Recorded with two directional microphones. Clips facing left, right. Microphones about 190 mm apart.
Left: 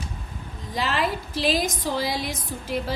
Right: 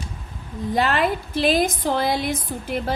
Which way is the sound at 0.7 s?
55° right (ahead or behind).